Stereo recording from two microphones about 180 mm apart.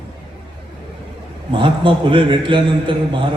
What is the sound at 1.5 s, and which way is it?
A man's voice, 25° right (ahead or behind).